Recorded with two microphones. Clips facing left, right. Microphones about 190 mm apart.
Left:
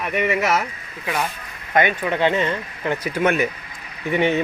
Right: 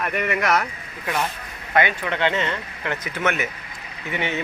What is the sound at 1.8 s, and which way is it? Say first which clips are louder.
Speech: left 3 dB; 15° left (ahead or behind).